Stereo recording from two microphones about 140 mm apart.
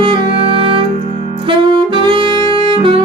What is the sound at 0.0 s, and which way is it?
Music, 40° right (ahead or behind).